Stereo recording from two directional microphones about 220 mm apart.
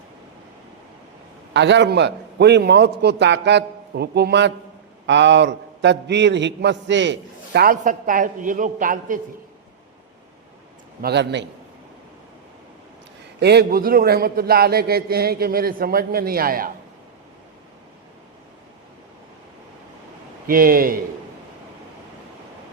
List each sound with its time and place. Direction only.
1.5 s a man's voice: 55° right (ahead or behind); by 9.2 s 40° right (ahead or behind)
11.0 s a man's voice: 50° right (ahead or behind)
13.4 s a man's voice: 50° right (ahead or behind)
20.5 s speech: 40° right (ahead or behind)